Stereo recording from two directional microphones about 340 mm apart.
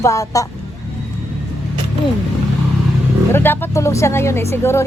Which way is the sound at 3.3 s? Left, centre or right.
Centre.